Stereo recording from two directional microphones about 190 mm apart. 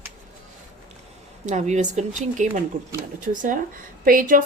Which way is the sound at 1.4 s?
40° right (ahead or behind).